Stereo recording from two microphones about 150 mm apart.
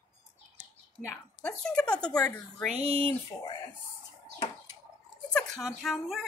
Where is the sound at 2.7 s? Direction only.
40° right (ahead or behind).